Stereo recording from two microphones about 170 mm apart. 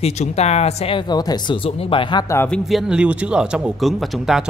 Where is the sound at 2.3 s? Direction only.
5° left (ahead or behind).